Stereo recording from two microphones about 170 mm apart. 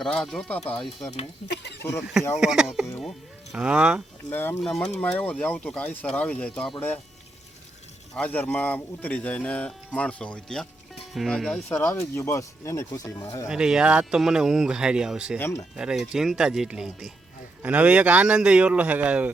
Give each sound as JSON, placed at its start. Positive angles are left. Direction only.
{"t": 0.0, "sound": "speech", "side_deg": 5}
{"t": 1.5, "sound": "a sound", "side_deg": 80}
{"t": 2.0, "sound": "speech", "side_deg": -5}
{"t": 4.3, "sound": "speech", "side_deg": 10}
{"t": 8.1, "sound": "speech", "side_deg": 5}
{"t": 13.5, "sound": "speech", "side_deg": -5}
{"t": 15.4, "sound": "speech", "side_deg": 15}
{"t": 15.7, "sound": "speech", "side_deg": -5}